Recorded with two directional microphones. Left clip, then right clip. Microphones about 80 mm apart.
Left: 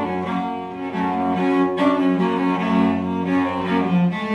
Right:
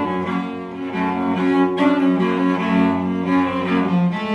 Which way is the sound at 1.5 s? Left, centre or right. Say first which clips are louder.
Right 3 dB; right.